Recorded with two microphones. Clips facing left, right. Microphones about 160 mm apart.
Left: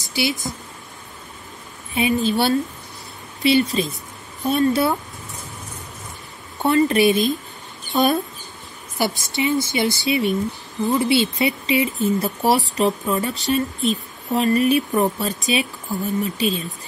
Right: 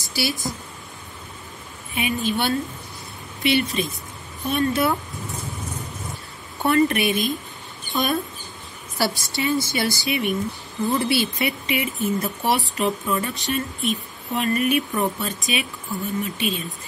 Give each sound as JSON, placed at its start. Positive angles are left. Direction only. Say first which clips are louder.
{"t": 0.0, "sound": "speech", "louder": "left 3 dB", "side_deg": 20}
{"t": 2.0, "sound": "speech", "louder": "left 5 dB", "side_deg": 30}
{"t": 6.6, "sound": "speech", "louder": "left 3 dB", "side_deg": 25}
{"t": 7.9, "sound": "speech", "louder": "left 5 dB", "side_deg": 40}
{"t": 8.9, "sound": "speech", "louder": "left 2 dB", "side_deg": 20}